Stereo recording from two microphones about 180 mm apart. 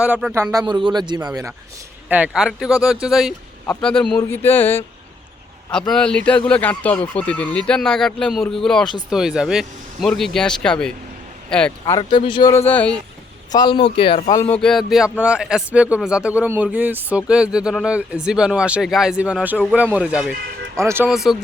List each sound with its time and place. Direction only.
0.0 s speech: 5° right (ahead or behind)
0.5 s speech: 25° right (ahead or behind)
2.0 s speech: 10° right (ahead or behind)
4.2 s a sound: 10° left (ahead or behind)
5.7 s speech: 5° left (ahead or behind)
11.9 s a man's voice: 25° left (ahead or behind); by 12.9 s 10° left (ahead or behind)
13.5 s a man's voice: 25° left (ahead or behind)
14.3 s speech: 15° left (ahead or behind); by 21.3 s 5° right (ahead or behind)